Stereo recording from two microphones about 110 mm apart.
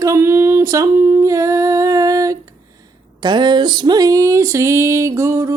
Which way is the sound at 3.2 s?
45° right (ahead or behind).